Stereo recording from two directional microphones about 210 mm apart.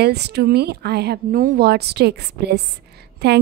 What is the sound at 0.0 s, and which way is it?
A woman's voice, 50° right (ahead or behind).